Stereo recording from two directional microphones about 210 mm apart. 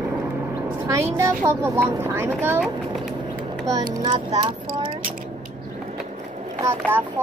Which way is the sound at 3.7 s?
20° right (ahead or behind).